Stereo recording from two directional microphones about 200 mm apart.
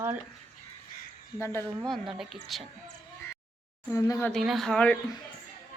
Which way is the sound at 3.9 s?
15° left (ahead or behind).